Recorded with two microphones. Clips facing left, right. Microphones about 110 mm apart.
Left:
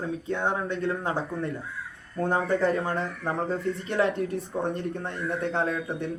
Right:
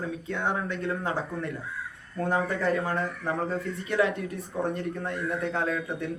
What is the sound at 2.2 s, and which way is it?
Speech, 30° left (ahead or behind).